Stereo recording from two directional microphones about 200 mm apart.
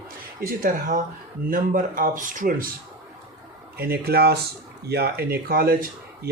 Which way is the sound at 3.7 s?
50° right (ahead or behind).